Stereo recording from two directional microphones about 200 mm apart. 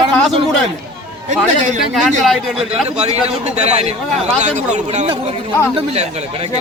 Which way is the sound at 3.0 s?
30° right (ahead or behind).